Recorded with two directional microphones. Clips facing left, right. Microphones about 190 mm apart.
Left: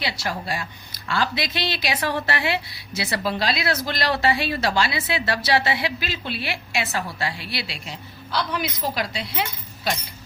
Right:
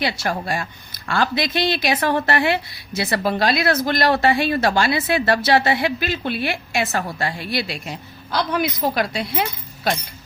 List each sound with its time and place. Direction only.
0.0 s a woman's voice: 50° right (ahead or behind)